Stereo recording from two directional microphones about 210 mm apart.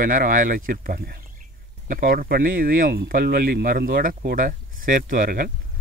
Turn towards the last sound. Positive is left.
turn(degrees=-45)  # may be behind; listen again after turning